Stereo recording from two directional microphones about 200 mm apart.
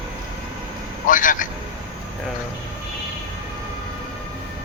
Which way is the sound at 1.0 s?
40° left (ahead or behind).